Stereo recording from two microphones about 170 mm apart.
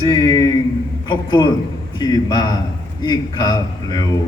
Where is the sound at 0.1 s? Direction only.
25° left (ahead or behind).